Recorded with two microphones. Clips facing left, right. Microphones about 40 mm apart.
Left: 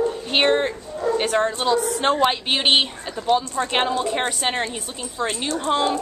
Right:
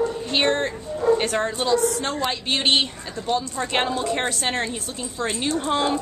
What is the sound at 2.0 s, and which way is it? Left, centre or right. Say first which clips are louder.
Speech: left 7 dB; left.